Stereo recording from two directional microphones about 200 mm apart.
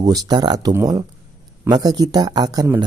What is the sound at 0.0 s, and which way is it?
Speech, 20° right (ahead or behind).